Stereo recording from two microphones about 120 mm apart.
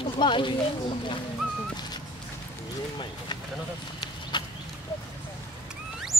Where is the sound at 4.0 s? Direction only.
40° left (ahead or behind).